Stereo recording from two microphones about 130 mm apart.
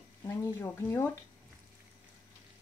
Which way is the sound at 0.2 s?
25° left (ahead or behind).